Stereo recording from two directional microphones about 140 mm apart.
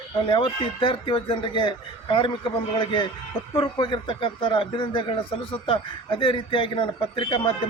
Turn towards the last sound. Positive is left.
turn(degrees=35)  # may be behind; listen again after turning